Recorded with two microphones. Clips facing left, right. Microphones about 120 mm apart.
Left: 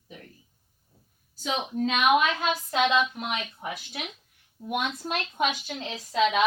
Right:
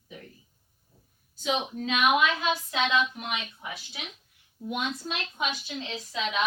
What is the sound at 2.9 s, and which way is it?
A woman's voice, 50° left (ahead or behind).